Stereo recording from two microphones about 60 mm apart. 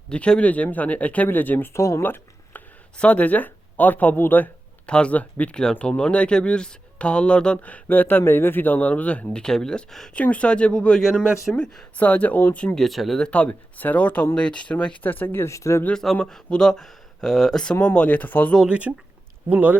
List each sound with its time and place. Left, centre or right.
0.1 s speech: centre; by 1.7 s left
1.7 s speech: left
2.0 s a sound: left
3.0 s speech: left
4.9 s speech: centre
10.2 s speech: left
12.8 s speech: centre
13.1 s speech: centre
15.0 s speech: left
15.4 s speech: left
15.9 s speech: centre
17.9 s speech: left
18.7 s speech: right